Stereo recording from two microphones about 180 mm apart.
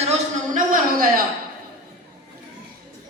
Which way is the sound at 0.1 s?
50° right (ahead or behind).